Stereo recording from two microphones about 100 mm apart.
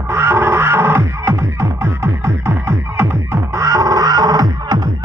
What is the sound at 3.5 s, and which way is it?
Music, 30° right (ahead or behind).